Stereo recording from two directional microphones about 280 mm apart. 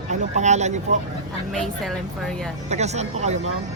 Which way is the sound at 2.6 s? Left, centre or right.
Right.